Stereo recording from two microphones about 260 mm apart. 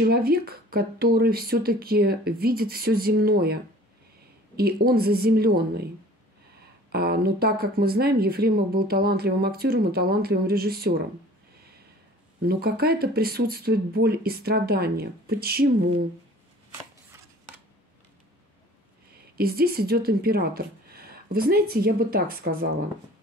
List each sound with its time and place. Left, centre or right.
0.0 s speech: right
6.9 s speech: right
12.4 s speech: right
19.3 s speech: right